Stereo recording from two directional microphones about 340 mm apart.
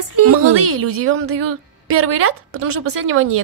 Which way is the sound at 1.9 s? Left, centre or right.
Right.